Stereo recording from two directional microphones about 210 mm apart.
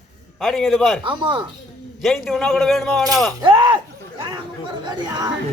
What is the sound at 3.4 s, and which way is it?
Speech, 25° right (ahead or behind).